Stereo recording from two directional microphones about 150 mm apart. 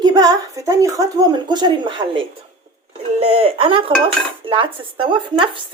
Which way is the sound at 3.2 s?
40° right (ahead or behind).